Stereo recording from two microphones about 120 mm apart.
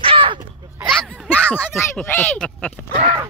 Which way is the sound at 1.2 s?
15° left (ahead or behind).